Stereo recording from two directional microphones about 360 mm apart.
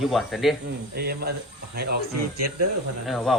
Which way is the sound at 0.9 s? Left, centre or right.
Right.